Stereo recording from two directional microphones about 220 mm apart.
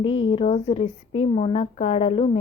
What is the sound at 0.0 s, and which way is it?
Speech, 25° left (ahead or behind).